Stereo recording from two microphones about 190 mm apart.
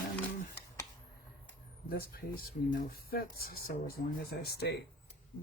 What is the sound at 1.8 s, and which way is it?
Speech, 50° left (ahead or behind).